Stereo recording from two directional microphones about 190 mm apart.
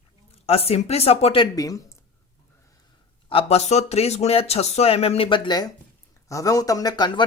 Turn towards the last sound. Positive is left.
turn(degrees=20)  # may be behind; listen again after turning